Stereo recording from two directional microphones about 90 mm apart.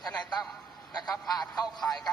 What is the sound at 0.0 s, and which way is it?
A man's voice, 5° left (ahead or behind).